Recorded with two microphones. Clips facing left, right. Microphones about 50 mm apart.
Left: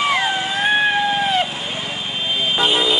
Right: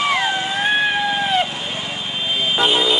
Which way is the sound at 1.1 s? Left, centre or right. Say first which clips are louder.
Even; centre.